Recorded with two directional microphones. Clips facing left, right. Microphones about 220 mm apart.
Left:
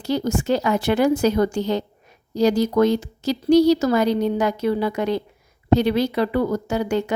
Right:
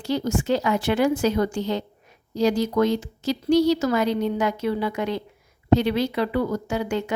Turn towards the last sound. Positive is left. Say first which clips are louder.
# left 3 dB
turn(degrees=40)  # may be behind; listen again after turning